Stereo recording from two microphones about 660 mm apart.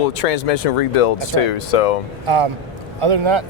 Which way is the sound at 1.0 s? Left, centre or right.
Left.